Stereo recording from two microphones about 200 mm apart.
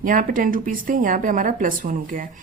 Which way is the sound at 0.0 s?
45° right (ahead or behind).